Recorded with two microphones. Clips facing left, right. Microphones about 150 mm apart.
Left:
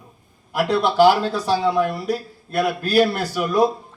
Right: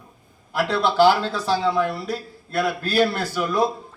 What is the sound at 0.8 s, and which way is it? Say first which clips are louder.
Speech: left 1 dB; 5° left (ahead or behind).